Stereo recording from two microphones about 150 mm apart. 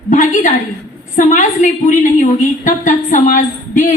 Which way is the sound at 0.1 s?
55° left (ahead or behind).